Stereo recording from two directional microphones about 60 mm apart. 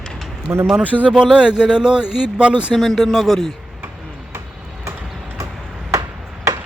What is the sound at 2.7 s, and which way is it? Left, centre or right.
Speech, centre.